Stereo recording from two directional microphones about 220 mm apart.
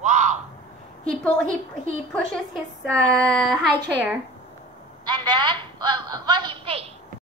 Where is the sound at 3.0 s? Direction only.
Centre (ahead or behind).